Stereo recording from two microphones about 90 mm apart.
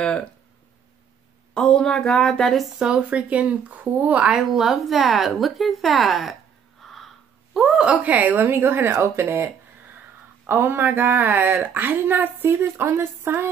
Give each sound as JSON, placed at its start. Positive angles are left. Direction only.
{"t": 0.0, "sound": "speech", "side_deg": 10}
{"t": 1.5, "sound": "speech", "side_deg": 10}
{"t": 4.4, "sound": "speech", "side_deg": 0}
{"t": 6.8, "sound": "a sound", "side_deg": 0}
{"t": 7.5, "sound": "speech", "side_deg": -5}